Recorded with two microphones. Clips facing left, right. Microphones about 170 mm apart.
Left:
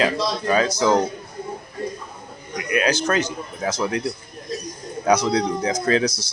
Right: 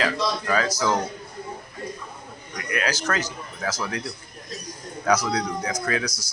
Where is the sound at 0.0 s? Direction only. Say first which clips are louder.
Left 4 dB; 20° left (ahead or behind).